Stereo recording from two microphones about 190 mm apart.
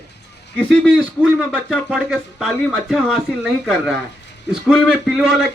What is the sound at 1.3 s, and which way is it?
Speech, centre (ahead or behind).